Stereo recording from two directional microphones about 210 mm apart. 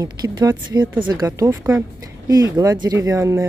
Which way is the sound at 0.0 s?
20° right (ahead or behind).